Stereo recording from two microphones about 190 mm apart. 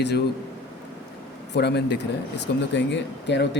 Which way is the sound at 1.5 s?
60° left (ahead or behind).